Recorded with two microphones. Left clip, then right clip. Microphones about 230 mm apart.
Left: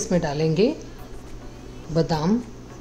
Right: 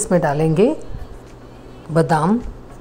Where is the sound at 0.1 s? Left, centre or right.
Centre.